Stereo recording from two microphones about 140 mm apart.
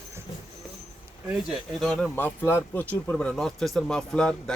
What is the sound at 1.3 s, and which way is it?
Speech, centre (ahead or behind).